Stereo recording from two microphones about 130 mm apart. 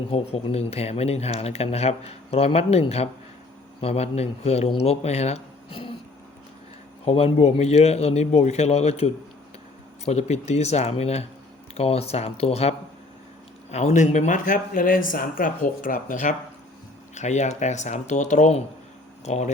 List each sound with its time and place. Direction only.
0.1 s speech: 50° left (ahead or behind)
7.0 s a man's voice: 50° left (ahead or behind)
10.1 s a man's voice: 55° left (ahead or behind)
13.7 s speech: 65° left (ahead or behind); by 16.3 s 85° left
17.2 s a man's voice: 65° left (ahead or behind)